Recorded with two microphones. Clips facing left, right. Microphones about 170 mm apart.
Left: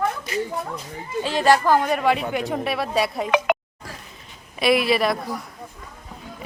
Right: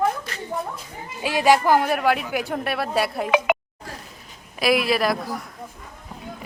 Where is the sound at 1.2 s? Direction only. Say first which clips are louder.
Even; 10° right (ahead or behind).